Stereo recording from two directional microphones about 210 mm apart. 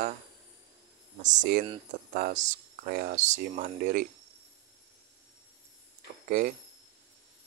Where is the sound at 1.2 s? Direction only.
35° right (ahead or behind).